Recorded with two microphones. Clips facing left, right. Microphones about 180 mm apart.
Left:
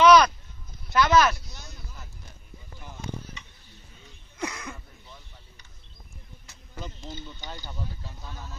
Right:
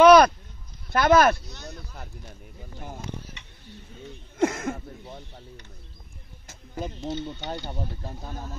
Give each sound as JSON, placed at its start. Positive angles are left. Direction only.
{"t": 0.0, "sound": "sheep", "side_deg": -55}
{"t": 0.8, "sound": "speech", "side_deg": -55}
{"t": 1.6, "sound": "a sound", "side_deg": -60}
{"t": 2.8, "sound": "a sound", "side_deg": -50}
{"t": 7.1, "sound": "speech", "side_deg": -70}
{"t": 7.8, "sound": "speech", "side_deg": -50}